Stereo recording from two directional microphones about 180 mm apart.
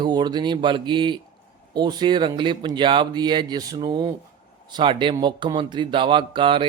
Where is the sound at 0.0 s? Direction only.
25° right (ahead or behind).